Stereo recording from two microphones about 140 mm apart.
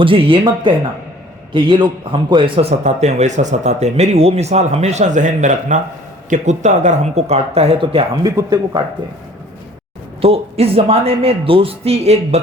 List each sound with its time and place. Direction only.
0.0 s speech: 40° right (ahead or behind)
8.2 s speech: 30° right (ahead or behind)
10.2 s speech: 45° right (ahead or behind)